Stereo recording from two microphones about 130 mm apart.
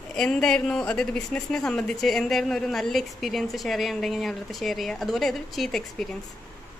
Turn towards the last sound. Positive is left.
turn(degrees=0)  # may be behind; listen again after turning